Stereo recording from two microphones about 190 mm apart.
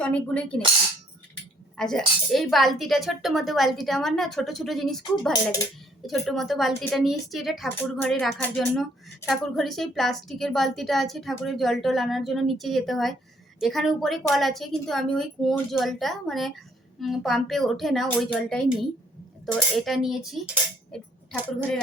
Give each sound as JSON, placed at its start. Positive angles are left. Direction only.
{"t": 0.0, "sound": "speech", "side_deg": 5}
{"t": 1.7, "sound": "speech", "side_deg": 5}
{"t": 7.8, "sound": "speech", "side_deg": 10}